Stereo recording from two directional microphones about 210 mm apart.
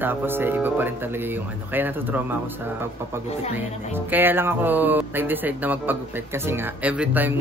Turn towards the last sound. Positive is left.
turn(degrees=-10)  # may be behind; listen again after turning